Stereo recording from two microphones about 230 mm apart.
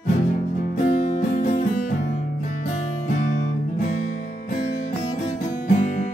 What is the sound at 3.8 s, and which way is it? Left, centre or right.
Music, left.